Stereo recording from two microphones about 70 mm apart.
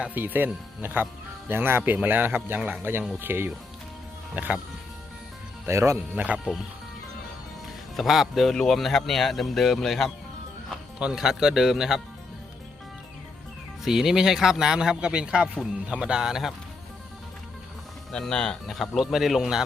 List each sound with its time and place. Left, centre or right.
0.0 s speech: right
2.6 s a man's voice: centre
3.2 s speech: right
5.6 s speech: right
6.1 s speech: centre
7.9 s a man's voice: centre
13.8 s a man's voice: centre
18.1 s speech: centre